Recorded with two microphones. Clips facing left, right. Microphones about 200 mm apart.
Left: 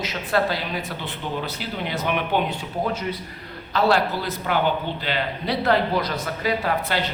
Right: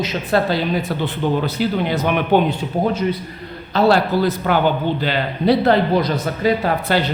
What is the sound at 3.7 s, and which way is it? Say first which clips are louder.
A man's voice: right 5 dB; 30° right (ahead or behind).